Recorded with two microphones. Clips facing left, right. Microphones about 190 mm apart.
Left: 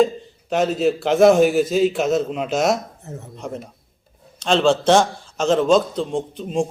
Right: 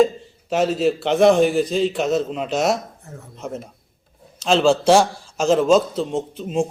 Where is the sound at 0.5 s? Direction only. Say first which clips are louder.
Even; centre (ahead or behind).